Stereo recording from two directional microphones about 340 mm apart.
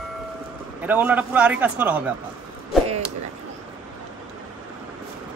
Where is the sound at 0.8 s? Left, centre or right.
Centre.